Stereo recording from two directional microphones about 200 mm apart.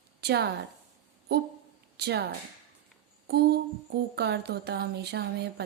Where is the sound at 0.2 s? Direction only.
55° right (ahead or behind).